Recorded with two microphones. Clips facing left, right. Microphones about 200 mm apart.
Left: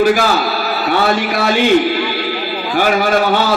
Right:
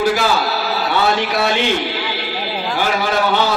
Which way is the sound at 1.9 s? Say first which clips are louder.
Left 6 dB; 55° left (ahead or behind).